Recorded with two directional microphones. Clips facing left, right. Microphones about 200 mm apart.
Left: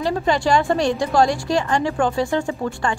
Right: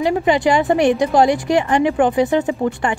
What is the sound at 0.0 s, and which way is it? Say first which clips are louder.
A woman's voice: right 4 dB; 15° right (ahead or behind).